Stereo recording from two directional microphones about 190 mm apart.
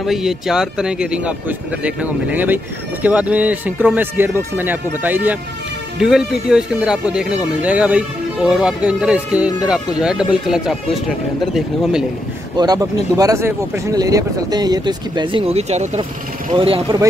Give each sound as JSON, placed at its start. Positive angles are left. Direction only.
{"t": 0.0, "sound": "speech", "side_deg": 0}
{"t": 12.5, "sound": "speech", "side_deg": -20}